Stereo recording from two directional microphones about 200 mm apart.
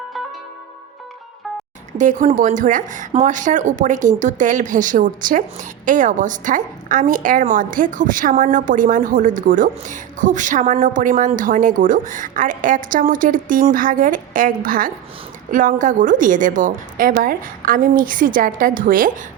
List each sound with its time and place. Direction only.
2.0 s a woman's voice: 40° right (ahead or behind)